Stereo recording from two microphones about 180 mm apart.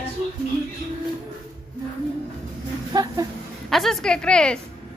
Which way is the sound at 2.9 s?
20° right (ahead or behind).